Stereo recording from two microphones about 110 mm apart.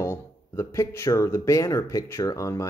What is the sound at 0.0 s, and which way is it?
Speech, 25° left (ahead or behind).